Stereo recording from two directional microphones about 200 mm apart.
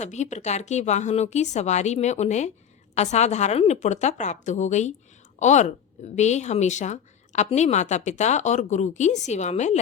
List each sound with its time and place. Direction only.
0.0 s a woman's voice: 35° left (ahead or behind)